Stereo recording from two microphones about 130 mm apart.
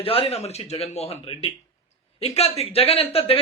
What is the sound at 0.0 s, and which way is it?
Speech, 45° left (ahead or behind).